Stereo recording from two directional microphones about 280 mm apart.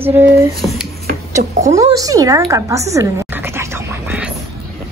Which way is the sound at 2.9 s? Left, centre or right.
Centre.